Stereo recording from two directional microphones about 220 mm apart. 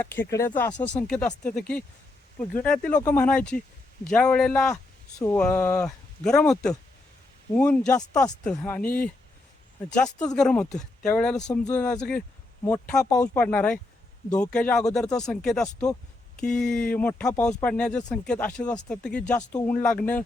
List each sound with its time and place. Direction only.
0.0 s speech: 10° left (ahead or behind)